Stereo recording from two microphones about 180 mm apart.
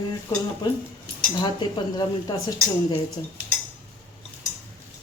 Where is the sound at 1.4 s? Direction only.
25° left (ahead or behind).